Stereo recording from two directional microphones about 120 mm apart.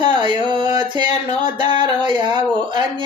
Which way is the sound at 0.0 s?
40° right (ahead or behind).